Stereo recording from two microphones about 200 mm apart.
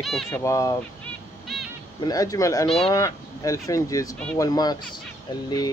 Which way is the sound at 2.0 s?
20° left (ahead or behind).